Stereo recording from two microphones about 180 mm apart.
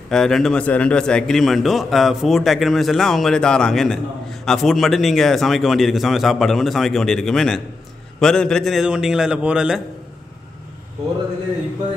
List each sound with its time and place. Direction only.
0.1 s a man's voice: centre (ahead or behind)